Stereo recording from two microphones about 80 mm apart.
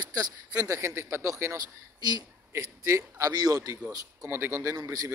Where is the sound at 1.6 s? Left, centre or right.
Right.